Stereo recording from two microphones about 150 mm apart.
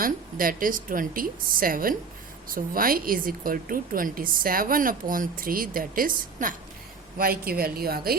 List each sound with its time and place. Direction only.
0.0 s a woman's voice: 70° right (ahead or behind)
7.2 s a woman's voice: 80° right